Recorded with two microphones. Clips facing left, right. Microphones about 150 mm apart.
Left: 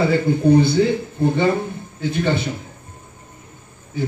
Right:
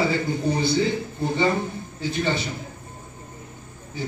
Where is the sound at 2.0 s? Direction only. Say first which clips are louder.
Left 4 dB; 55° left (ahead or behind).